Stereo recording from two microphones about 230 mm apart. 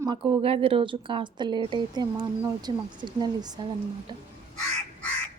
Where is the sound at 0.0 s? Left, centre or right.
Right.